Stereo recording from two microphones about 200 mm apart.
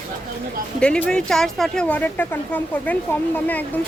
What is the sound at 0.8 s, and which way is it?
A woman's voice, 5° left (ahead or behind).